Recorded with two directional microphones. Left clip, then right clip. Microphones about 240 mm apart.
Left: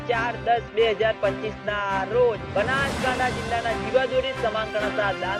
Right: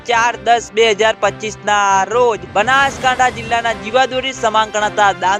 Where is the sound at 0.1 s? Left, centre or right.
Right.